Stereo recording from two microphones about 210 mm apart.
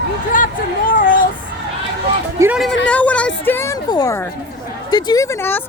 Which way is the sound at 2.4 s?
5° right (ahead or behind).